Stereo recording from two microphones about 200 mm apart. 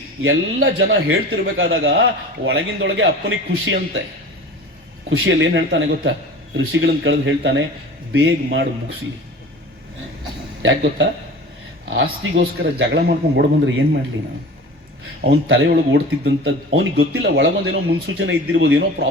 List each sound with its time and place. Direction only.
0.2 s a man's voice: 75° right (ahead or behind)
1.5 s a man's voice: 60° right (ahead or behind)
5.0 s a man's voice: 75° right (ahead or behind)
10.6 s a man's voice: 70° right (ahead or behind)
15.2 s speech: 70° right (ahead or behind)